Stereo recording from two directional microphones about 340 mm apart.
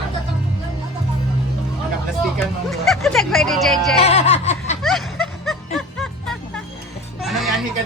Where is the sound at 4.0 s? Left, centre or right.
Centre.